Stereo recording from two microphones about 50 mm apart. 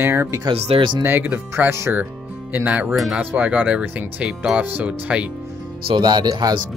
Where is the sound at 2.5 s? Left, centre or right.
Right.